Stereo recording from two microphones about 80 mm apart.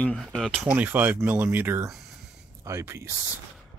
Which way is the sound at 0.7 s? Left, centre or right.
Right.